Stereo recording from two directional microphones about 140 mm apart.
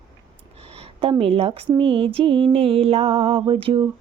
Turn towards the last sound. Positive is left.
turn(degrees=-40)  # may be behind; listen again after turning